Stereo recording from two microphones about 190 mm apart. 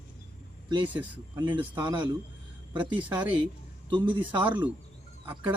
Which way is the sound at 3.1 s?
10° right (ahead or behind).